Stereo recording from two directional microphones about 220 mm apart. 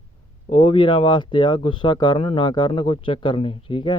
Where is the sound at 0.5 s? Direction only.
20° left (ahead or behind).